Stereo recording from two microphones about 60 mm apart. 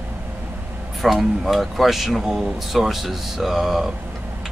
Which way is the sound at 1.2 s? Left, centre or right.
Centre.